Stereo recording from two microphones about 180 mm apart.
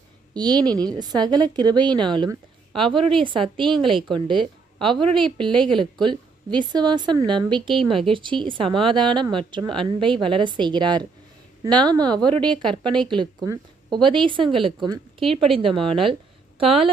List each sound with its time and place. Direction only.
0.3 s a woman's voice: 25° right (ahead or behind)
0.6 s a woman's voice: 5° left (ahead or behind)
0.9 s a woman's voice: 20° right (ahead or behind)